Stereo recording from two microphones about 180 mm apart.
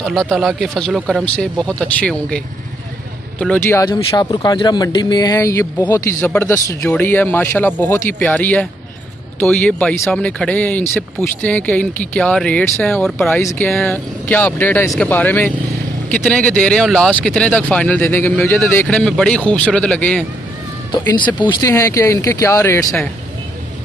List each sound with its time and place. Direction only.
0.0 s speech: centre (ahead or behind)
3.9 s speech: 25° left (ahead or behind); by 13.4 s 5° left (ahead or behind)
13.4 s speech: 15° left (ahead or behind)
20.9 s speech: 25° left (ahead or behind)